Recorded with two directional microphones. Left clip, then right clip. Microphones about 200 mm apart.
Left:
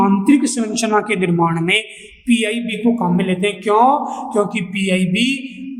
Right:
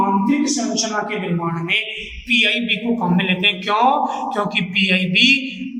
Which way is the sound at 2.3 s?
40° left (ahead or behind).